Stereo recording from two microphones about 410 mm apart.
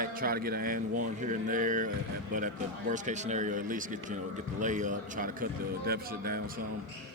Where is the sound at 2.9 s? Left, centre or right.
Centre.